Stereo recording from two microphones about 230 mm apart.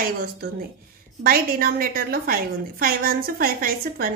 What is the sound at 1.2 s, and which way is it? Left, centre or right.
A woman's voice, right.